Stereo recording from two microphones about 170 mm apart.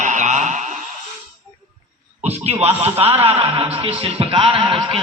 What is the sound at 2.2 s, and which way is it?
Speech, 40° right (ahead or behind).